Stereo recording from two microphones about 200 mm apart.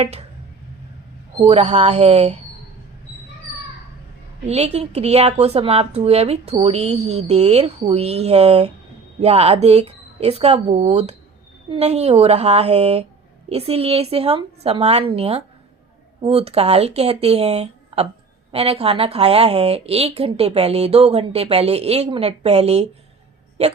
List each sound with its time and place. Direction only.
0.0 s speech: 35° right (ahead or behind)
1.4 s a woman's voice: 30° right (ahead or behind)
4.4 s a woman's voice: 30° right (ahead or behind)